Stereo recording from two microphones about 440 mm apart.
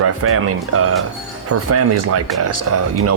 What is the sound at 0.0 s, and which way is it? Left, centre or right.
Speech, right.